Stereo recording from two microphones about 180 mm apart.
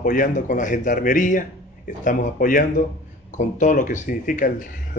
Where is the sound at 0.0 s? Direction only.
45° left (ahead or behind).